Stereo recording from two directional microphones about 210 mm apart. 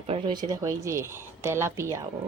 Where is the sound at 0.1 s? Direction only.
20° right (ahead or behind).